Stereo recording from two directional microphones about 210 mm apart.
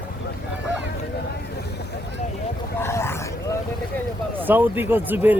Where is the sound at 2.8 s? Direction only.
10° left (ahead or behind).